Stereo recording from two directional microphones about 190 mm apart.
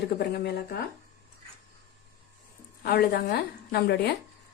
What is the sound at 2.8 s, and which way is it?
A woman's voice, 55° left (ahead or behind).